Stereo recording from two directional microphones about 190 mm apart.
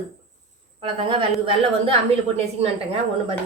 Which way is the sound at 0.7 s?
30° right (ahead or behind).